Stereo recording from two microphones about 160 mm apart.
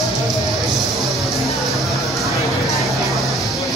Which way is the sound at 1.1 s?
Centre (ahead or behind).